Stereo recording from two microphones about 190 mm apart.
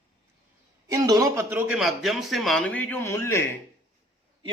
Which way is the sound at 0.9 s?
20° right (ahead or behind).